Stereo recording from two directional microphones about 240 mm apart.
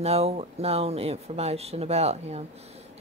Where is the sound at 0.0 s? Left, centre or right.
Right.